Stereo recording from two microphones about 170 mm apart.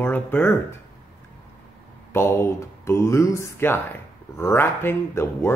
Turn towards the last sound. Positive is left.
turn(degrees=15)  # may be behind; listen again after turning